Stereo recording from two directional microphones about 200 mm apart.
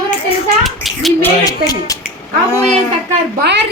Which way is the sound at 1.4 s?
20° left (ahead or behind).